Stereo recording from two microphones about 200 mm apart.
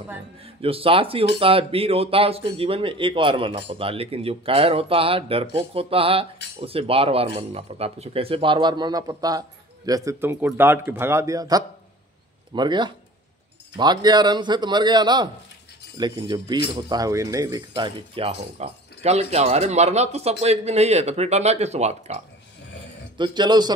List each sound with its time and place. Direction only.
0.6 s a man's voice: 30° right (ahead or behind)
23.1 s speech: 20° right (ahead or behind)